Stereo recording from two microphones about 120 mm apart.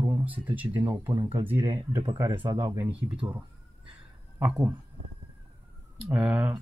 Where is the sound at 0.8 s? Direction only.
25° right (ahead or behind).